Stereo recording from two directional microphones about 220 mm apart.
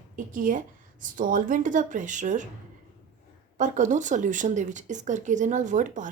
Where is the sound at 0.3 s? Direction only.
35° right (ahead or behind).